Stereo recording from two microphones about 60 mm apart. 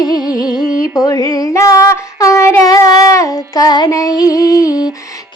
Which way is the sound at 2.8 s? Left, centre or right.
Left.